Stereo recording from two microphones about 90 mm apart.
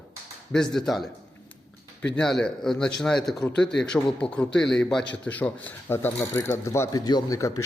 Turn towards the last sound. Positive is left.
turn(degrees=50)  # may be behind; listen again after turning